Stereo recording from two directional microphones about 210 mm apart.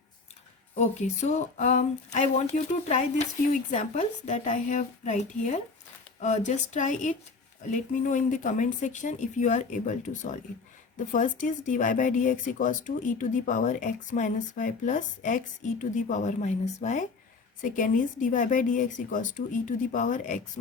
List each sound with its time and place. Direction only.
0.8 s speech: 30° left (ahead or behind)